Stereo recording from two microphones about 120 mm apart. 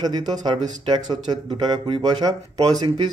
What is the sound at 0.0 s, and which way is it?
Speech, 35° right (ahead or behind).